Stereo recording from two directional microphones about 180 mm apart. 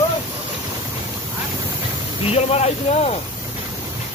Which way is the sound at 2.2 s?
35° left (ahead or behind).